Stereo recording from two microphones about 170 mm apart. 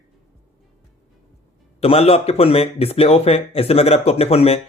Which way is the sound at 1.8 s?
35° left (ahead or behind).